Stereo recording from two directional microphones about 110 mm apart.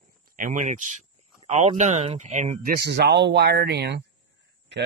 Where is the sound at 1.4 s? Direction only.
90° right.